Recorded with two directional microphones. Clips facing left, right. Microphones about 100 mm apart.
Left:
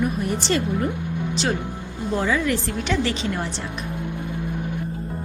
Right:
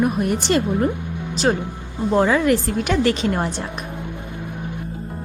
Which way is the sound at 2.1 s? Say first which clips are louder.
Right 6 dB; 50° right (ahead or behind).